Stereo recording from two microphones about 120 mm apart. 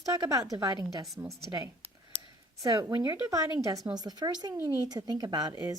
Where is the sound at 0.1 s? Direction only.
30° right (ahead or behind).